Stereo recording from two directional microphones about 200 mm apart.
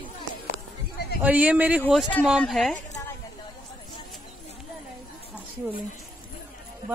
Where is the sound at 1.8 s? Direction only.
5° left (ahead or behind).